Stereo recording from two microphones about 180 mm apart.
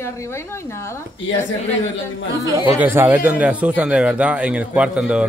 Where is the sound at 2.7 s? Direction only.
10° right (ahead or behind).